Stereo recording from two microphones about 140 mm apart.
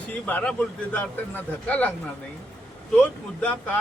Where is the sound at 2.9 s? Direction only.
10° left (ahead or behind).